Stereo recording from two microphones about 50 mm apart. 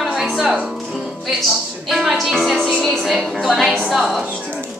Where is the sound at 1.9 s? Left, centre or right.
Centre.